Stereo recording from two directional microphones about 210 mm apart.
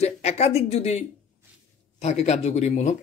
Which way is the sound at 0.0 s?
30° left (ahead or behind).